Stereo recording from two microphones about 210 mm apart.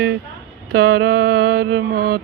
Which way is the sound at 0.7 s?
50° right (ahead or behind).